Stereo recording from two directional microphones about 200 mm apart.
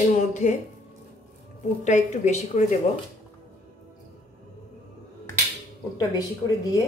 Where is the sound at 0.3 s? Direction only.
35° left (ahead or behind).